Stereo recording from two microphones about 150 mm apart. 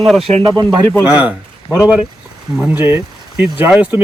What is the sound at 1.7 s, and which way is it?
Speech, 10° right (ahead or behind).